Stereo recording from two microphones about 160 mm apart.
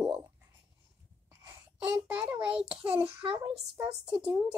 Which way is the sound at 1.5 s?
10° right (ahead or behind).